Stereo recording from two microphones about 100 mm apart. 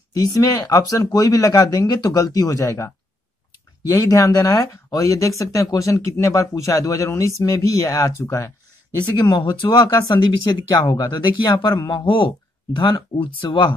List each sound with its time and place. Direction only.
0.1 s speech: 40° left (ahead or behind)
9.3 s speech: 50° left (ahead or behind)
9.7 s speech: 40° left (ahead or behind)